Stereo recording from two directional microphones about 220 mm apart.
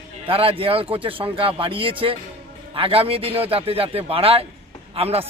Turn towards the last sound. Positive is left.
turn(degrees=-25)  # may be behind; listen again after turning